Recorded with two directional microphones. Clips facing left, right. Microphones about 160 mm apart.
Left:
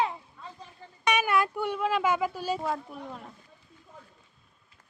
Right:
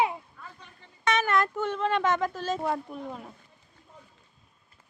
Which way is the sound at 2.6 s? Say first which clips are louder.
Right 2 dB; centre (ahead or behind).